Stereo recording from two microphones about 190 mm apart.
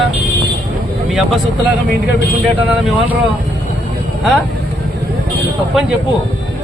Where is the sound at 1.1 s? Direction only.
Centre (ahead or behind).